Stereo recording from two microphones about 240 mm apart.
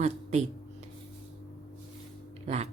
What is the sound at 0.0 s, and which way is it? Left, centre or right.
Speech, right.